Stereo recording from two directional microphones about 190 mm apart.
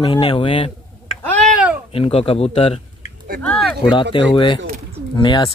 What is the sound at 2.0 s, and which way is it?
Speech, 30° left (ahead or behind).